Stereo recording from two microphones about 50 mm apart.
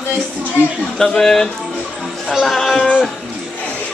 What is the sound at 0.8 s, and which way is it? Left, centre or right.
Speech, centre.